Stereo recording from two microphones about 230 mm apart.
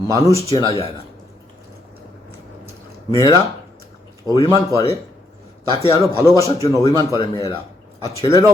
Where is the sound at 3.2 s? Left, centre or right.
Centre.